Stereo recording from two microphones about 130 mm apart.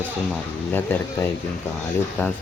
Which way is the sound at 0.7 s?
15° left (ahead or behind).